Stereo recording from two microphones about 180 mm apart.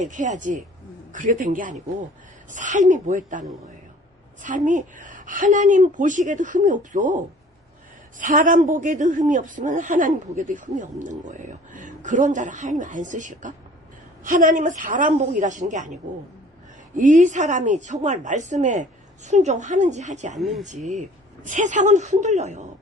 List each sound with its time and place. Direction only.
0.1 s speech: 45° right (ahead or behind)
4.4 s speech: 45° right (ahead or behind)
8.2 s speech: 45° right (ahead or behind)
17.0 s a woman's voice: 45° right (ahead or behind)
20.4 s speech: centre (ahead or behind)
20.8 s a woman's voice: 40° right (ahead or behind)